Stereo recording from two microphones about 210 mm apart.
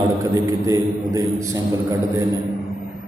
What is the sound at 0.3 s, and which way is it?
A man's voice, 15° right (ahead or behind).